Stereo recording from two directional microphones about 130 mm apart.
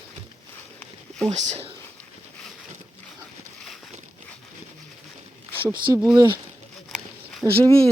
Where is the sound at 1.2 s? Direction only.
60° right (ahead or behind).